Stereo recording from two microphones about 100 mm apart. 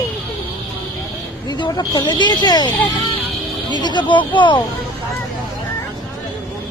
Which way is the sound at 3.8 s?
50° left (ahead or behind).